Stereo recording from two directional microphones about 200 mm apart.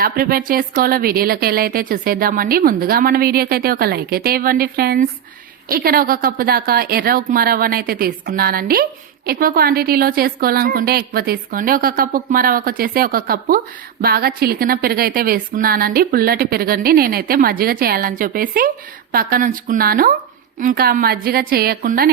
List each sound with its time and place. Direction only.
0.0 s a woman's voice: 45° right (ahead or behind)